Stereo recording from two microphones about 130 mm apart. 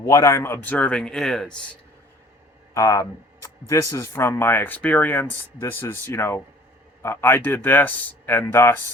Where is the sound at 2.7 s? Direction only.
25° left (ahead or behind).